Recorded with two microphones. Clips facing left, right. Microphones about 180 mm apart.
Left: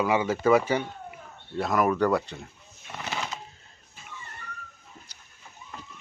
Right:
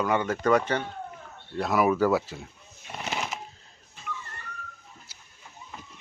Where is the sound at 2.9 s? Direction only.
20° right (ahead or behind).